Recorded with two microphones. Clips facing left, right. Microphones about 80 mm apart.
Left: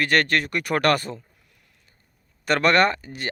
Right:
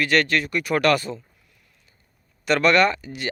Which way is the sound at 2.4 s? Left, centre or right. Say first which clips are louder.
Right 1 dB; left.